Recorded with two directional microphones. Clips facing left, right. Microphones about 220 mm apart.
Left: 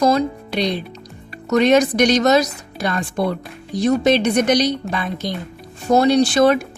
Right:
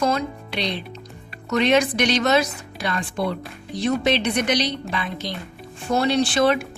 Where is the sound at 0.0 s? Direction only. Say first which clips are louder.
Left 6 dB; 35° left (ahead or behind).